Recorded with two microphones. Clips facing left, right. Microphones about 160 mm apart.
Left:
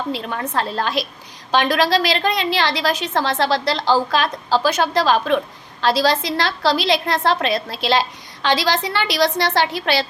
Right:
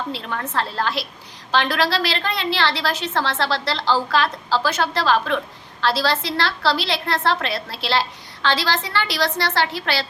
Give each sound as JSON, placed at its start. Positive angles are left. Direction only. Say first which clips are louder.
{"t": 0.1, "sound": "a woman's voice", "louder": "left 3 dB", "side_deg": 15}